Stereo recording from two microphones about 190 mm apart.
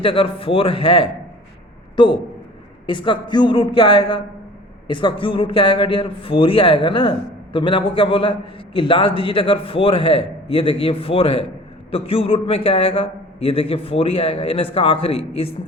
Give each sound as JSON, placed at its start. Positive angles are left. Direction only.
{"t": 0.0, "sound": "a man's voice", "side_deg": 30}